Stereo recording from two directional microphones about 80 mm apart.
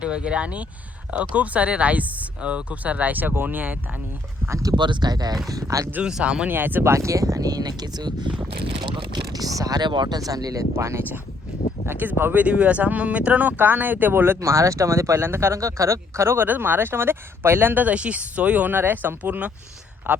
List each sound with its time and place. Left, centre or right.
0.0 s speech: centre
4.4 s speech: right
4.7 s speech: right
5.5 s speech: right
5.9 s speech: centre
6.5 s speech: right
6.9 s speech: right
8.8 s speech: right
9.3 s speech: right
10.8 s speech: right; by 20.2 s centre